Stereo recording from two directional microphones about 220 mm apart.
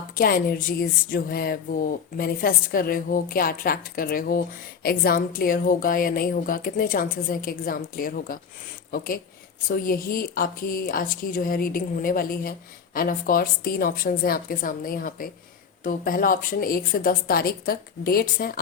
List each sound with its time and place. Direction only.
0.2 s a woman's voice: 40° left (ahead or behind)